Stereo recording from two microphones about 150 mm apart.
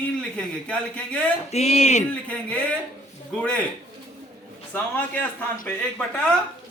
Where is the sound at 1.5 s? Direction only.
45° left (ahead or behind).